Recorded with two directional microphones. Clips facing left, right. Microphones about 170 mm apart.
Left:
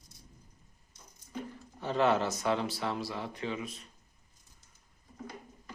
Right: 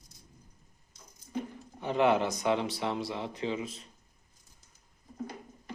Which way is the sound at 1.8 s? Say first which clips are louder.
Right 2 dB; 15° right (ahead or behind).